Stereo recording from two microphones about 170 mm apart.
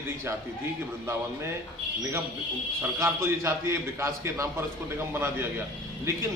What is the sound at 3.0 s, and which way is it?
A man's voice, 15° right (ahead or behind).